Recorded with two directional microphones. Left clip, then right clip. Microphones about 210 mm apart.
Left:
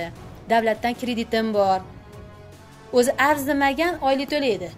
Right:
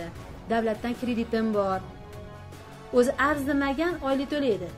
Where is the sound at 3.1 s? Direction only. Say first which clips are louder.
Left 5 dB; 5° right (ahead or behind).